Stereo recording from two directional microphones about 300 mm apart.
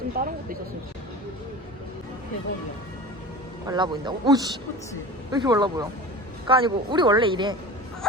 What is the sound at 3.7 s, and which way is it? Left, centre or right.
Speech, centre.